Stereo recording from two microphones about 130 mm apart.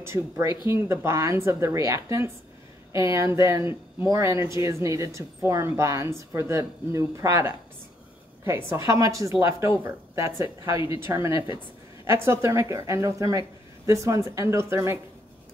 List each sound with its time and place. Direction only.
0.0 s speech: 20° right (ahead or behind)
11.3 s a sound: 40° left (ahead or behind)
12.1 s speech: 20° right (ahead or behind)